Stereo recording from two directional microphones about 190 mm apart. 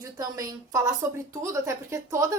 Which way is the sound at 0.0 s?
15° right (ahead or behind).